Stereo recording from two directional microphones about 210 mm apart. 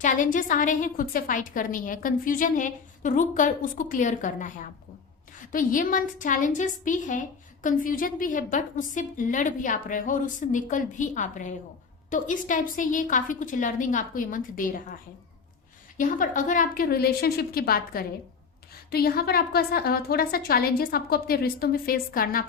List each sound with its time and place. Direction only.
0.0 s a woman's voice: 40° left (ahead or behind)
16.0 s a woman's voice: 40° left (ahead or behind)